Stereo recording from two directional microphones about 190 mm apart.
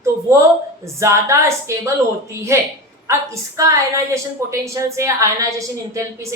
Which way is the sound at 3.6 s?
15° right (ahead or behind).